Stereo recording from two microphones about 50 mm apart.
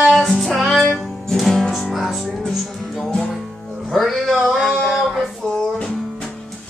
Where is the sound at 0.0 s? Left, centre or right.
Centre.